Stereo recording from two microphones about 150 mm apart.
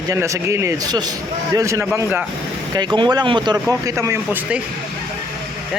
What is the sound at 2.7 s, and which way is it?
Speech, 30° right (ahead or behind).